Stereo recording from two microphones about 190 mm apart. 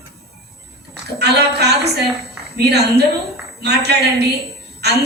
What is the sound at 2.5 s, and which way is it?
A woman's voice, 60° right (ahead or behind).